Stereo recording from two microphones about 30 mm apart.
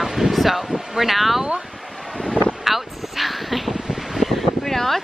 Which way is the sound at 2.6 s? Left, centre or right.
Centre.